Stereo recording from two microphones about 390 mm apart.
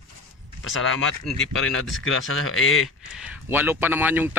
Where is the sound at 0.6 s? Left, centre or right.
Left.